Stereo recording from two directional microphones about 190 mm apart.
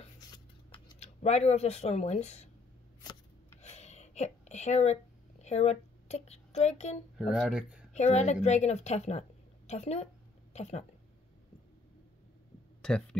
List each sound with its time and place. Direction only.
0.3 s scissors: 25° left (ahead or behind)
3.0 s scissors: 20° left (ahead or behind)
3.6 s a sound: 35° left (ahead or behind)
5.4 s speech: 35° left (ahead or behind)
7.2 s speech: centre (ahead or behind)
7.9 s a woman's voice: 35° left (ahead or behind)
12.8 s speech: 5° left (ahead or behind)